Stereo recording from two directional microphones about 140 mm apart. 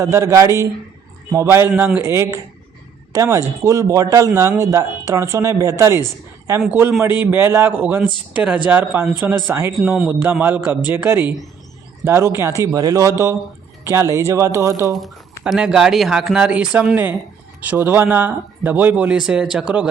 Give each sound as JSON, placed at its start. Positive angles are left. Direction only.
{"t": 0.0, "sound": "speech", "side_deg": -20}
{"t": 1.7, "sound": "speech", "side_deg": -5}
{"t": 2.0, "sound": "speech", "side_deg": -20}
{"t": 7.3, "sound": "speech", "side_deg": -15}
{"t": 9.8, "sound": "speech", "side_deg": -5}
{"t": 15.4, "sound": "speech", "side_deg": -5}